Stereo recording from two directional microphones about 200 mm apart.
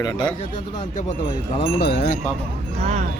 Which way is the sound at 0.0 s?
20° left (ahead or behind).